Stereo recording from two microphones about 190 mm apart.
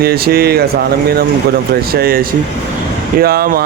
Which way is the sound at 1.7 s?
55° right (ahead or behind).